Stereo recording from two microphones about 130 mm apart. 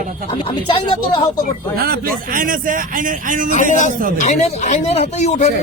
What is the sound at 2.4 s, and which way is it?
A man's voice, 90° right.